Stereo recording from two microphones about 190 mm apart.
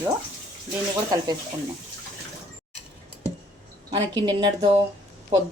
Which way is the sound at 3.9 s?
25° right (ahead or behind).